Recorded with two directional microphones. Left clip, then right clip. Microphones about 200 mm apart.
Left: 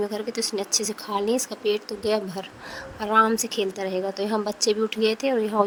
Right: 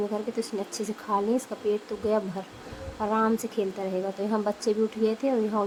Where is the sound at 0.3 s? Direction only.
45° left (ahead or behind).